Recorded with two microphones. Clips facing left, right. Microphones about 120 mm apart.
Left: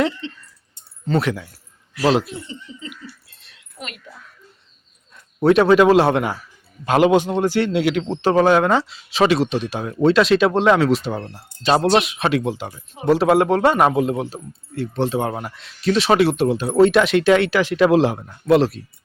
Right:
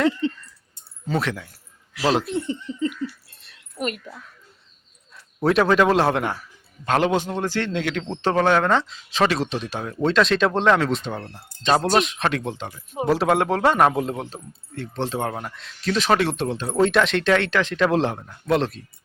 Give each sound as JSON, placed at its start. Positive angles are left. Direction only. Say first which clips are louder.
{"t": 0.2, "sound": "a sound", "louder": "right 8 dB", "side_deg": -40}
{"t": 1.2, "sound": "speech", "louder": "left 4 dB", "side_deg": 0}
{"t": 2.3, "sound": "speech", "louder": "right 8 dB", "side_deg": -55}
{"t": 5.1, "sound": "a man's voice", "louder": "left 5 dB", "side_deg": 0}